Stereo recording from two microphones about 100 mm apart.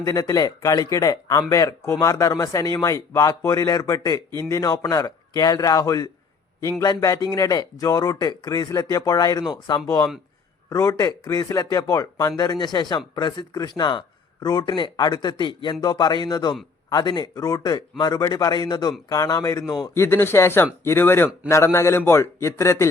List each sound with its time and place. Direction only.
0.0 s a man's voice: 35° left (ahead or behind)
9.8 s a man's voice: 30° left (ahead or behind)
12.4 s a man's voice: 45° left (ahead or behind)